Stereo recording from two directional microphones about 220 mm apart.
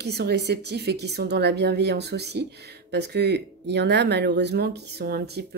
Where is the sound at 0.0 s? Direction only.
45° right (ahead or behind).